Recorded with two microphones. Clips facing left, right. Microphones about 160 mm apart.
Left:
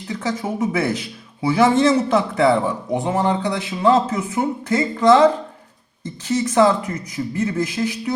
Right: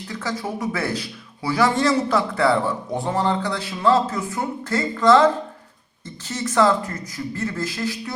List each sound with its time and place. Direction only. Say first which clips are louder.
0.1 s a man's voice: left 4 dB; 20° left (ahead or behind)